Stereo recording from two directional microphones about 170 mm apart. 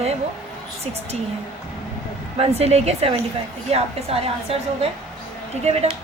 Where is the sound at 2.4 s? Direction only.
40° right (ahead or behind).